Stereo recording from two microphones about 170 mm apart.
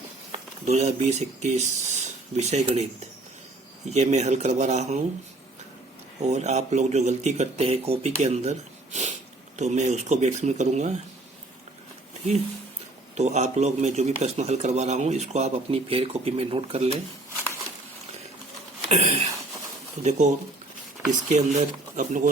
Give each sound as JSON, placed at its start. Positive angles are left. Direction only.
{"t": 0.6, "sound": "speech", "side_deg": -40}
{"t": 3.8, "sound": "speech", "side_deg": -40}
{"t": 6.2, "sound": "speech", "side_deg": -40}
{"t": 13.1, "sound": "speech", "side_deg": -40}
{"t": 18.9, "sound": "a sound", "side_deg": -40}
{"t": 20.0, "sound": "speech", "side_deg": -45}